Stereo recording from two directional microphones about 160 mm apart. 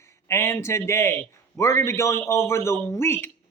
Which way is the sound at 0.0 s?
15° left (ahead or behind).